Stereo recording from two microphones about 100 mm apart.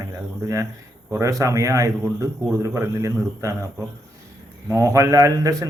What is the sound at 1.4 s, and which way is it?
Speech, 30° right (ahead or behind).